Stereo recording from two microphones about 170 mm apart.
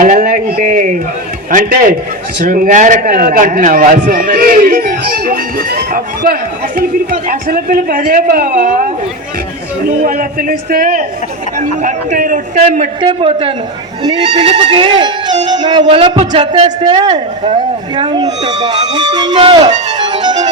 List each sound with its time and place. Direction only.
0.0 s a man's voice: 55° right (ahead or behind)
10.1 s a man's voice: 55° right (ahead or behind)
13.0 s a man's voice: 30° right (ahead or behind)
20.0 s music: 25° right (ahead or behind)